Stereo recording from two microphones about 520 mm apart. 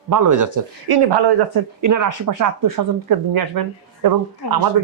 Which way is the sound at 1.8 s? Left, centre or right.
Right.